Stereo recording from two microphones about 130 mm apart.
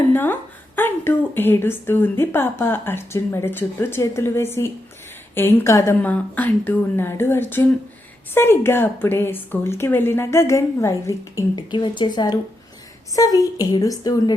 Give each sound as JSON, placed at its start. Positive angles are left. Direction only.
{"t": 0.1, "sound": "a sound", "side_deg": 15}
{"t": 0.8, "sound": "a woman's voice", "side_deg": 15}
{"t": 11.7, "sound": "a woman's voice", "side_deg": 35}